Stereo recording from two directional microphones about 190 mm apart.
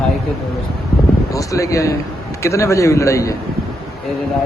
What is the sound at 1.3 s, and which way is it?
A man's voice, 15° left (ahead or behind).